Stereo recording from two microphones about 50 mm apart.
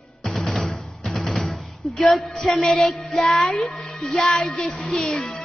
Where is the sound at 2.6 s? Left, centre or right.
Centre.